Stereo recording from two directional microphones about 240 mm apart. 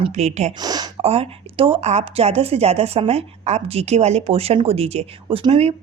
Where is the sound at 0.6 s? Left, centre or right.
Centre.